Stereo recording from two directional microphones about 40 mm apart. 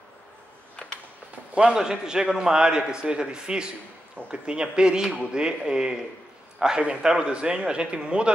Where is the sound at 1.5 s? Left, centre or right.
Right.